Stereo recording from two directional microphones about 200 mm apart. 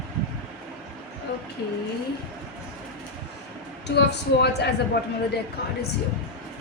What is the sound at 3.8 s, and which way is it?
Speech, 55° left (ahead or behind).